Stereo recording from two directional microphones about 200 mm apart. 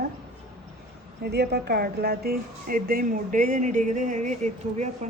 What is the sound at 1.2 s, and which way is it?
A woman's voice, 55° right (ahead or behind).